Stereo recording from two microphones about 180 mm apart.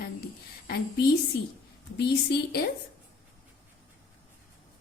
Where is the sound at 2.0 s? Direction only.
65° left (ahead or behind).